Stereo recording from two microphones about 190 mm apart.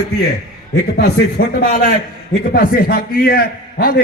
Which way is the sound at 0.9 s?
55° left (ahead or behind).